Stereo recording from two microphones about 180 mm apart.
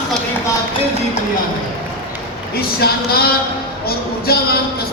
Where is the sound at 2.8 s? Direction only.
60° left (ahead or behind).